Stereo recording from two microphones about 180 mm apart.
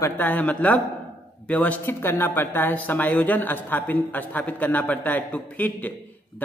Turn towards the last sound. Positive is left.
turn(degrees=10)  # may be behind; listen again after turning